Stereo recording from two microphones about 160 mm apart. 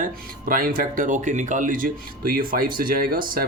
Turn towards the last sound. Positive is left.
turn(degrees=-65)  # may be behind; listen again after turning